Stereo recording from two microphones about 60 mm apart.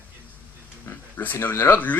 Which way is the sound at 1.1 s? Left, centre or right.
Left.